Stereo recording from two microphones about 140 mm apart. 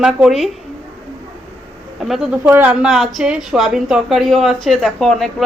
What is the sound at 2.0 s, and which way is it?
A woman's voice, centre (ahead or behind).